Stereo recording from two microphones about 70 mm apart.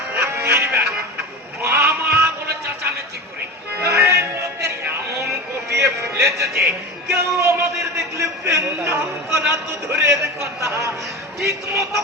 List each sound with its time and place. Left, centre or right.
0.1 s music: right
3.8 s music: right
7.9 s a man's voice: right